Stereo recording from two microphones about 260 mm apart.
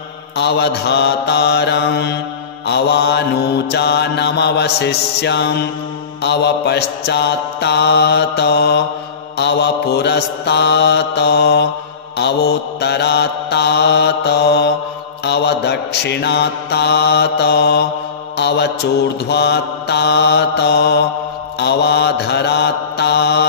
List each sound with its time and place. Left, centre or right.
0.4 s mantra: left